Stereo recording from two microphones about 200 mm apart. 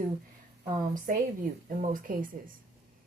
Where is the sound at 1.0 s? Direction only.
40° right (ahead or behind).